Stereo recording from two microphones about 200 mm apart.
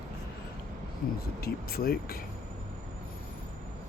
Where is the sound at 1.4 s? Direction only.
50° left (ahead or behind).